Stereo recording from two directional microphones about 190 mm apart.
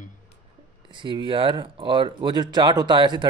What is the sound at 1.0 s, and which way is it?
Speech, 25° right (ahead or behind).